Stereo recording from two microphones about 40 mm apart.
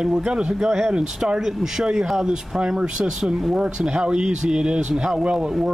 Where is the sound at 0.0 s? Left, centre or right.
Right.